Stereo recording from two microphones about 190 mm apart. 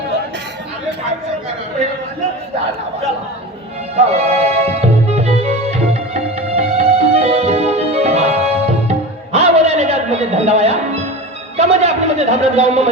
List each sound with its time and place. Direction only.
4.0 s music: 35° right (ahead or behind)
11.5 s a man's voice: 35° right (ahead or behind)